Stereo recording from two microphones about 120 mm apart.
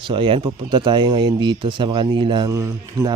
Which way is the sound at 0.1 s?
45° right (ahead or behind).